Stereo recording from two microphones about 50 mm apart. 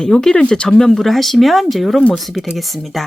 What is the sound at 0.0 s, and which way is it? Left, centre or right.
Speech, centre.